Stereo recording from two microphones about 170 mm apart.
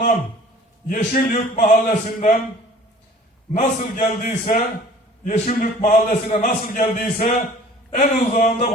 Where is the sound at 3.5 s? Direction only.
40° left (ahead or behind).